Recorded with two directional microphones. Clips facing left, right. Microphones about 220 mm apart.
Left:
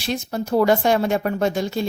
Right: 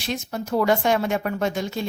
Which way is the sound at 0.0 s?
35° left (ahead or behind).